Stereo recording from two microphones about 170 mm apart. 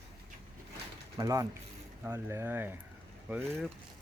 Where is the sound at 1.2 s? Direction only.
20° right (ahead or behind).